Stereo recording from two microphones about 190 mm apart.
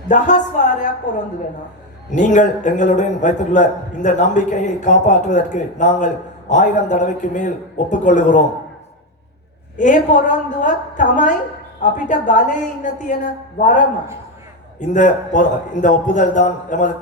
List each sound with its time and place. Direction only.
0.1 s a man's voice: 40° left (ahead or behind)
9.7 s a man's voice: 40° left (ahead or behind)
14.8 s a man's voice: 40° left (ahead or behind)